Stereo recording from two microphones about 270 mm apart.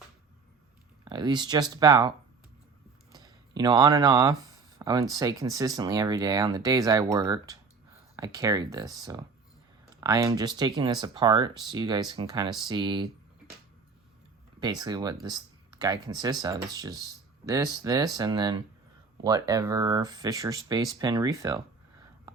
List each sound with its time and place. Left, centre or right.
1.0 s speech: centre
3.1 s a sound: centre
4.8 s speech: centre
14.6 s speech: centre